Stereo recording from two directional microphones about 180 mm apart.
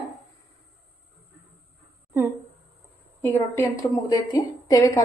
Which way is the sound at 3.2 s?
15° left (ahead or behind).